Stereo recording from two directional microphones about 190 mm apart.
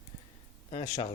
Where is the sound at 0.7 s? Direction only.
25° left (ahead or behind).